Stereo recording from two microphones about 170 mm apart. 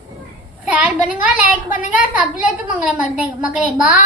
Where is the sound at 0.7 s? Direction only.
10° right (ahead or behind).